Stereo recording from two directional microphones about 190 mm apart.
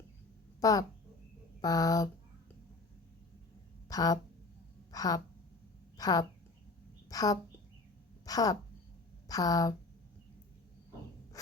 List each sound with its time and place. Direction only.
0.6 s a woman's voice: 20° left (ahead or behind)
3.8 s a woman's voice: 20° left (ahead or behind)
7.1 s a sound: 20° left (ahead or behind)
9.3 s speech: 20° left (ahead or behind)